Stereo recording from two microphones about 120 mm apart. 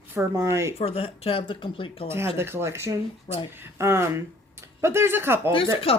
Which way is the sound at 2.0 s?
20° right (ahead or behind).